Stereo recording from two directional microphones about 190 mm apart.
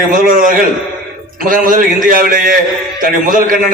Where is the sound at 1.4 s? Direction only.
45° right (ahead or behind).